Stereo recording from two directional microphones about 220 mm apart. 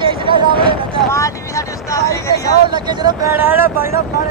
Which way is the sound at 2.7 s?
20° right (ahead or behind).